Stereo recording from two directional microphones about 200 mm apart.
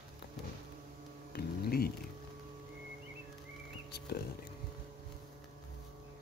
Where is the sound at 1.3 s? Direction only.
50° left (ahead or behind).